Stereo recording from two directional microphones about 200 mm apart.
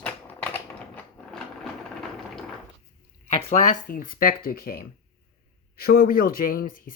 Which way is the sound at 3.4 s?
35° left (ahead or behind).